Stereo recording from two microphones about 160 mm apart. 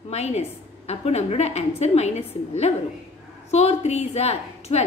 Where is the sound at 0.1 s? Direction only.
40° left (ahead or behind).